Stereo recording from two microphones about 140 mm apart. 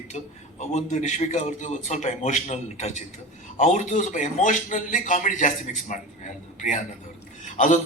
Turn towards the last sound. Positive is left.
turn(degrees=60)  # may be behind; listen again after turning